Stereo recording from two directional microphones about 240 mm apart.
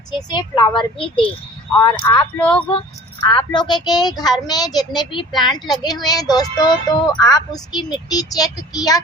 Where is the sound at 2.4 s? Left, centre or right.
Centre.